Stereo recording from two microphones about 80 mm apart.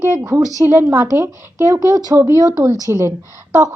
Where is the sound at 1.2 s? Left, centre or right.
Right.